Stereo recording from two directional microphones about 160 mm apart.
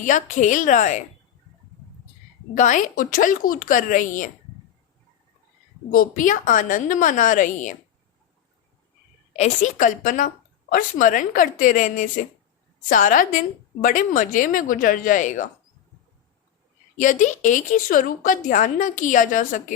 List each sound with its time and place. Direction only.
0.0 s a woman's voice: 50° left (ahead or behind)
2.6 s a woman's voice: 50° left (ahead or behind)
5.9 s a woman's voice: 60° left (ahead or behind)
9.3 s a woman's voice: 45° left (ahead or behind)
17.0 s a woman's voice: 50° left (ahead or behind)